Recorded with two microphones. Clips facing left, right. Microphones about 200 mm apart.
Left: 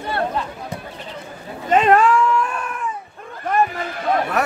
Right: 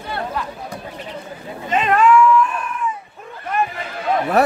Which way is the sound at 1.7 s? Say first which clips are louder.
Left 3 dB; 45° left (ahead or behind).